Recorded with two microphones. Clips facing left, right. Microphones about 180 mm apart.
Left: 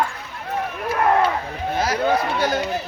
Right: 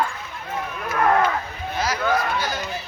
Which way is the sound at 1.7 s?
55° left (ahead or behind).